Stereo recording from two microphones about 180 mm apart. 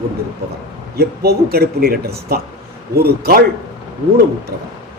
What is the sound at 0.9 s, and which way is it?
A man's voice, 60° right (ahead or behind).